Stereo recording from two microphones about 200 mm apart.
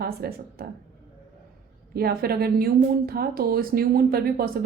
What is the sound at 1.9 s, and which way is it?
A woman's voice, 50° right (ahead or behind).